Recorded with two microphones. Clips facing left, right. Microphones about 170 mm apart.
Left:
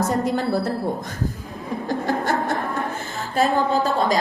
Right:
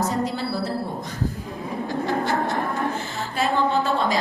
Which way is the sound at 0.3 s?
55° left (ahead or behind).